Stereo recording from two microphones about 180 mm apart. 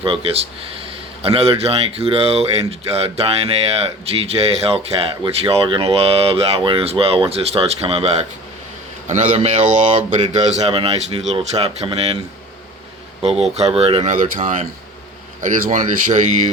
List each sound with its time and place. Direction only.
0.0 s speech: 30° right (ahead or behind)
13.2 s speech: 35° right (ahead or behind)